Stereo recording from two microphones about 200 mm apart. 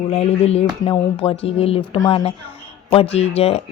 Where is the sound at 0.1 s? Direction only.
30° left (ahead or behind).